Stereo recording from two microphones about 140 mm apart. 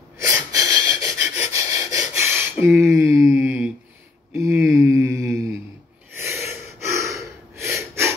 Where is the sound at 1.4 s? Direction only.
20° right (ahead or behind).